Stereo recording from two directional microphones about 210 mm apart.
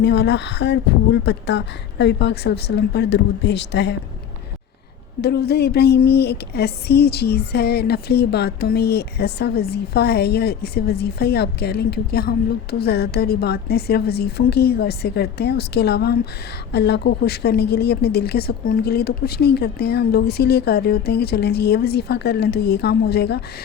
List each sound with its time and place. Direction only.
0.0 s speech: 55° left (ahead or behind)
5.2 s speech: 50° left (ahead or behind)